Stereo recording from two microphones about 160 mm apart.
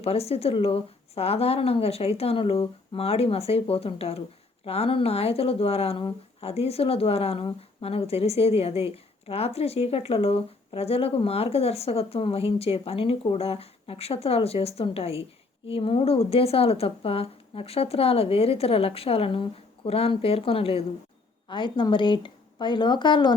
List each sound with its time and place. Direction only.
0.0 s speech: 40° left (ahead or behind)